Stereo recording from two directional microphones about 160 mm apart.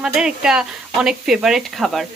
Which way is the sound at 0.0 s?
5° right (ahead or behind).